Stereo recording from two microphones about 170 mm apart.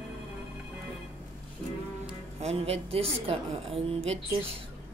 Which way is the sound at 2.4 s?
35° right (ahead or behind).